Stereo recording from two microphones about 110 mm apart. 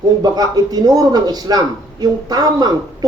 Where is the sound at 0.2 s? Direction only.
35° right (ahead or behind).